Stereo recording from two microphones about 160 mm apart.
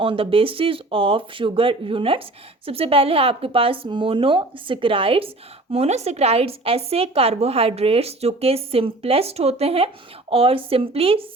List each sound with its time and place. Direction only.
0.0 s a woman's voice: 35° right (ahead or behind)